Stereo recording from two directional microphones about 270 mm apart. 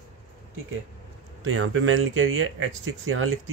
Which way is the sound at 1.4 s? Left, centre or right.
Right.